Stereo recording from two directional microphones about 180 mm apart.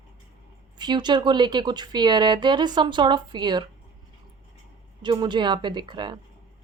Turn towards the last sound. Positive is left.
turn(degrees=-25)  # may be behind; listen again after turning